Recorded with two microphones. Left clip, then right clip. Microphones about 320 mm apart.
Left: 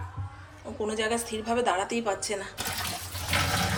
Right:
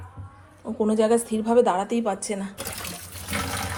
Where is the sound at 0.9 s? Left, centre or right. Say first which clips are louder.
Right 8 dB; centre.